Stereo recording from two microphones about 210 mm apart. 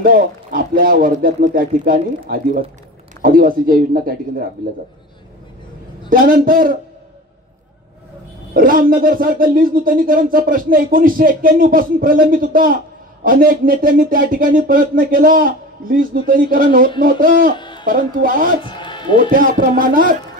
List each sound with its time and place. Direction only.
0.0 s speech: 40° right (ahead or behind)
6.0 s speech: 40° right (ahead or behind)
8.5 s speech: 40° right (ahead or behind)
16.3 s music: 40° right (ahead or behind)
17.0 s speech: 40° right (ahead or behind)
17.6 s a sound: 20° left (ahead or behind)
17.8 s music: 40° right (ahead or behind)
18.6 s music: 20° left (ahead or behind)
19.3 s music: 40° right (ahead or behind)